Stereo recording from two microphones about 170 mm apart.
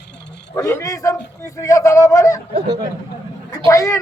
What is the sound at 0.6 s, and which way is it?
A man's voice, 20° left (ahead or behind).